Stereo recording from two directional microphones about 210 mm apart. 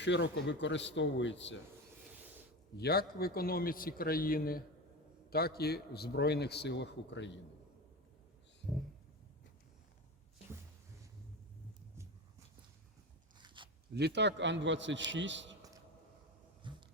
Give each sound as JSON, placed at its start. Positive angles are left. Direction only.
{"t": 0.0, "sound": "speech", "side_deg": 55}
{"t": 2.7, "sound": "a man's voice", "side_deg": 50}
{"t": 13.4, "sound": "biting", "side_deg": -25}
{"t": 13.9, "sound": "a man's voice", "side_deg": -55}
{"t": 16.7, "sound": "a sound", "side_deg": -20}